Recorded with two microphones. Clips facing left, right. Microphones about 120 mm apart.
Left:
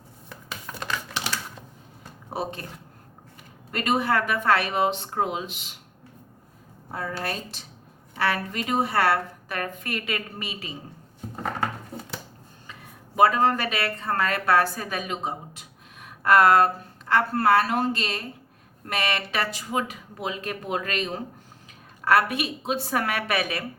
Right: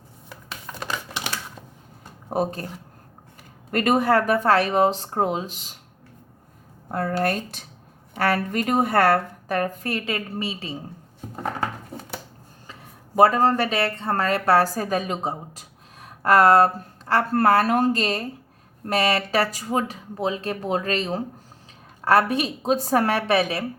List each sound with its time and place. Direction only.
0.3 s a sound: 10° right (ahead or behind)
2.3 s speech: 45° right (ahead or behind)
3.7 s a woman's voice: 50° right (ahead or behind)
6.9 s a woman's voice: 55° right (ahead or behind); by 10.8 s 30° right (ahead or behind)
13.1 s a woman's voice: 40° right (ahead or behind)